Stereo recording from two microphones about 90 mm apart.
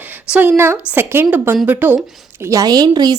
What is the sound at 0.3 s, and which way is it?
A woman's voice, 20° right (ahead or behind).